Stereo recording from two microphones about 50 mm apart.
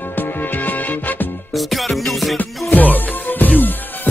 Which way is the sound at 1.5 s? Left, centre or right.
Centre.